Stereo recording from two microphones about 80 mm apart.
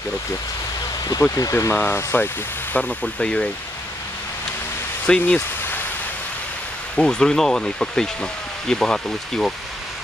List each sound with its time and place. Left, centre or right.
1.3 s speech: left
2.7 s speech: centre
5.0 s speech: centre
7.0 s speech: centre